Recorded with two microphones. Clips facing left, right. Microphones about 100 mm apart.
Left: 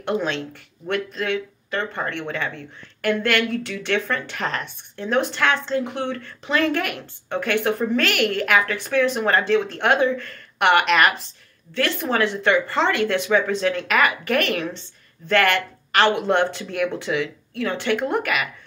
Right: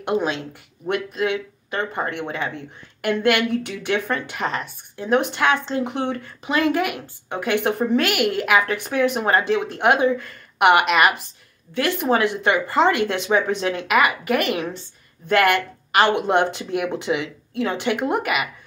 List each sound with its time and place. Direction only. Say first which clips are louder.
0.0 s speech: right 1 dB; 15° right (ahead or behind)